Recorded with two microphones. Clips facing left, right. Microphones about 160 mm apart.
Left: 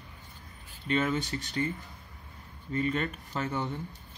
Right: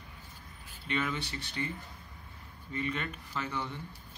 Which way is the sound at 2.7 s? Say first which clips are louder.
Left 6 dB; 40° left (ahead or behind).